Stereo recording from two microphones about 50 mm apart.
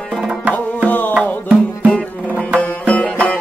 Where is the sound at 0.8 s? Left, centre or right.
Left.